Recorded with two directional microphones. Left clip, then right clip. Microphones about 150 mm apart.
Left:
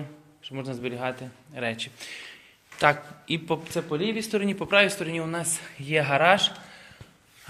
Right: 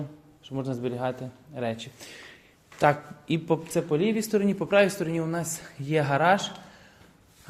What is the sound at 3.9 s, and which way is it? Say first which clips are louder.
A man's voice: right 2 dB; 80° right.